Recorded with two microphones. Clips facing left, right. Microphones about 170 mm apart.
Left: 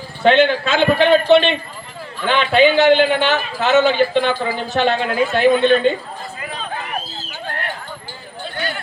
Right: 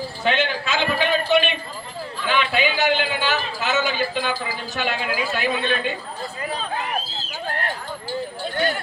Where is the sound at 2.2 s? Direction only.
25° left (ahead or behind).